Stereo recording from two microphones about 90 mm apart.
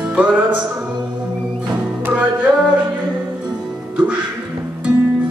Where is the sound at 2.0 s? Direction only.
15° right (ahead or behind).